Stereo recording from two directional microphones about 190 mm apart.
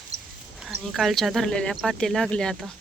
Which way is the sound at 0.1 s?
35° right (ahead or behind).